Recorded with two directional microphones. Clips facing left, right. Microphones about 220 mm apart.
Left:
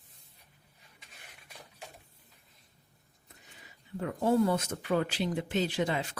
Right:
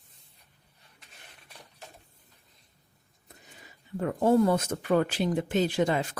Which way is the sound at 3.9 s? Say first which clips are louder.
Right 4 dB; 50° right (ahead or behind).